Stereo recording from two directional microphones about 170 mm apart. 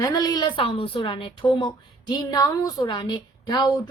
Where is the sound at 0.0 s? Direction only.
25° left (ahead or behind).